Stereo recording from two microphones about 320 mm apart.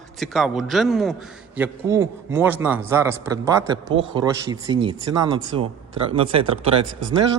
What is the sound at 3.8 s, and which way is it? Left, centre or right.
Speech, right.